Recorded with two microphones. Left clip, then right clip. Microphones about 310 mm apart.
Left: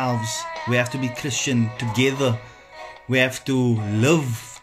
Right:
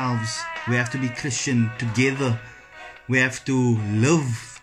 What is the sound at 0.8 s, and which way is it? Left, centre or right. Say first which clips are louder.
Speech: left 1 dB; left.